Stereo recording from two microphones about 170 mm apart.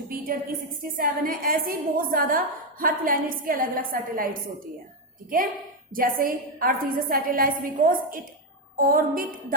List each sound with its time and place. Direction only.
0.1 s a sound: 55° right (ahead or behind)
0.9 s a woman's voice: 55° right (ahead or behind)
5.9 s a woman's voice: 55° right (ahead or behind)